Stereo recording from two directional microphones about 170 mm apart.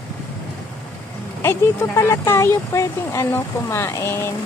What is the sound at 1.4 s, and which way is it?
Speech, 15° left (ahead or behind).